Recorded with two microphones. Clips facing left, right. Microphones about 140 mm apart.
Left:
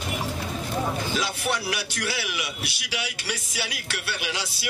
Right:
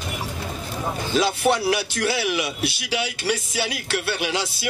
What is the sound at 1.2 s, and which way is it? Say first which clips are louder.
Speech: right 8 dB; 30° right (ahead or behind).